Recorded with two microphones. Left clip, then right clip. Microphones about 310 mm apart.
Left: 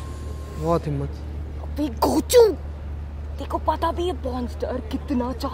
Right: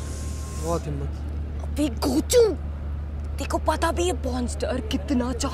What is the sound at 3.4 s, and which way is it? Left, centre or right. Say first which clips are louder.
Speech: left 1 dB; centre.